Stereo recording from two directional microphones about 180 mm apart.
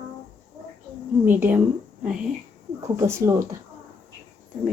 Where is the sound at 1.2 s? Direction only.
10° right (ahead or behind).